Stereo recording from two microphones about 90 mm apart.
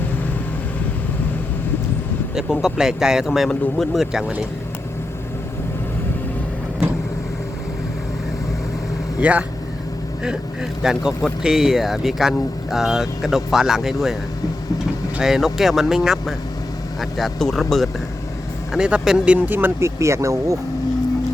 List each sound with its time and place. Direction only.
2.3 s speech: 5° right (ahead or behind)
9.2 s speech: 15° right (ahead or behind)
15.2 s speech: 5° right (ahead or behind)
18.7 s speech: 10° right (ahead or behind); by 20.6 s 35° right (ahead or behind)